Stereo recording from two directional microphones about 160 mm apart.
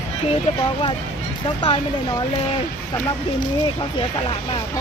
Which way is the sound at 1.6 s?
30° left (ahead or behind).